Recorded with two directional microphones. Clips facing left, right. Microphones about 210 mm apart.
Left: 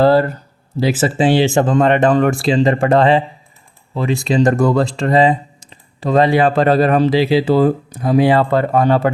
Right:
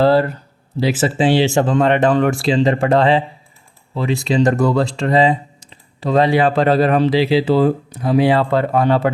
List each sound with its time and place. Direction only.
0.0 s speech: 45° left (ahead or behind)